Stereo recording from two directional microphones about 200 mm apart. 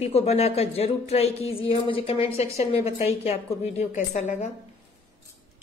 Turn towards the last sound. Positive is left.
turn(degrees=35)  # may be behind; listen again after turning